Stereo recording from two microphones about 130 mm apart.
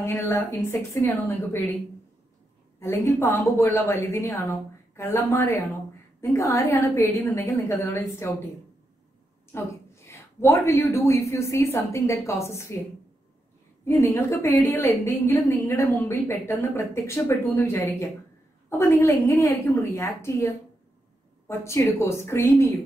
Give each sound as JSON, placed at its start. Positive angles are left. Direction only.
{"t": 0.0, "sound": "a woman's voice", "side_deg": 20}
{"t": 2.8, "sound": "a woman's voice", "side_deg": 20}
{"t": 9.5, "sound": "a woman's voice", "side_deg": 20}
{"t": 14.0, "sound": "a woman's voice", "side_deg": 20}